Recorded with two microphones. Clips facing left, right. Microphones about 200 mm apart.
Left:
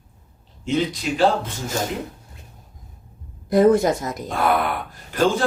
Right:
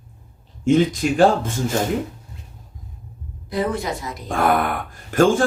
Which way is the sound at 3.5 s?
45° left (ahead or behind).